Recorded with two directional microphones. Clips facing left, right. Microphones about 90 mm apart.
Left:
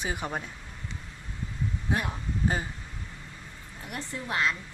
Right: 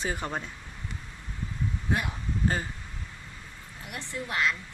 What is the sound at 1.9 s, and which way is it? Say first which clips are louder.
Speech: even; 15° left (ahead or behind).